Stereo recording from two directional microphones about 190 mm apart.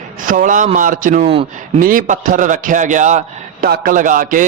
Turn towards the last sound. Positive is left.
turn(degrees=-45)  # may be behind; listen again after turning